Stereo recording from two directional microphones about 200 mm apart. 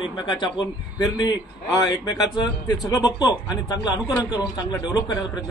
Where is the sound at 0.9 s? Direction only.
20° left (ahead or behind).